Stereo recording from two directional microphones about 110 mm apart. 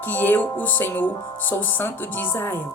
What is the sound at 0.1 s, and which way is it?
Speech, 15° left (ahead or behind).